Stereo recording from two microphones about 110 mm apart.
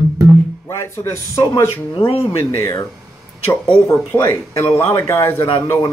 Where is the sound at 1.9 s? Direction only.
60° left (ahead or behind).